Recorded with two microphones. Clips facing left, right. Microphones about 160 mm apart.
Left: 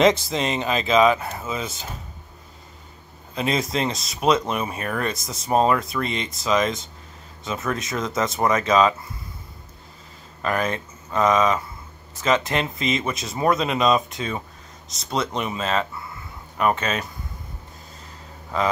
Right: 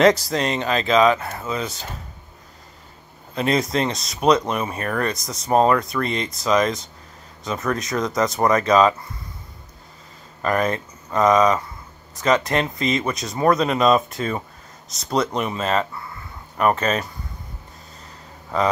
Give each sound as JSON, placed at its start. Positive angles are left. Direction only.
{"t": 0.3, "sound": "speech", "side_deg": 5}
{"t": 3.3, "sound": "speech", "side_deg": 0}
{"t": 10.4, "sound": "speech", "side_deg": 0}